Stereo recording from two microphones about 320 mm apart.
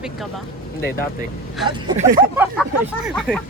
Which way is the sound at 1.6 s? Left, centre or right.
Centre.